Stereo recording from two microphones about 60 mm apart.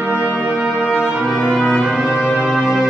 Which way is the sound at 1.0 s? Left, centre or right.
Centre.